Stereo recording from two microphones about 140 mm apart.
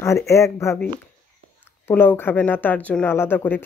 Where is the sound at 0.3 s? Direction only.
20° left (ahead or behind).